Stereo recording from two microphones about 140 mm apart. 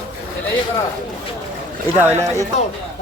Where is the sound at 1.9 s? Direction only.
15° right (ahead or behind).